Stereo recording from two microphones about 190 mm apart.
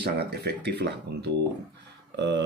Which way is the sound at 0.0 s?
60° right (ahead or behind).